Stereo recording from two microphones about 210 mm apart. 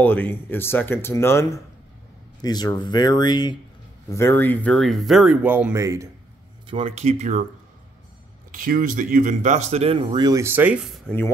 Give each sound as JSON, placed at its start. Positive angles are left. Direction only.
{"t": 0.0, "sound": "speech", "side_deg": 10}
{"t": 6.7, "sound": "speech", "side_deg": -30}
{"t": 8.5, "sound": "speech", "side_deg": -40}